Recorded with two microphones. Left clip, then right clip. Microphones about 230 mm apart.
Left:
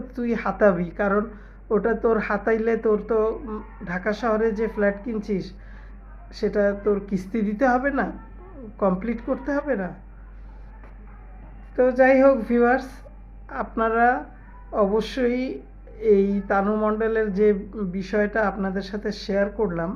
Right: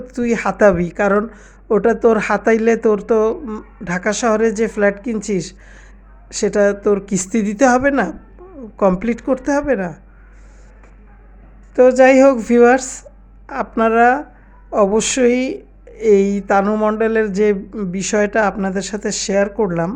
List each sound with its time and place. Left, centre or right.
0.0 s a woman's voice: right
11.7 s a woman's voice: right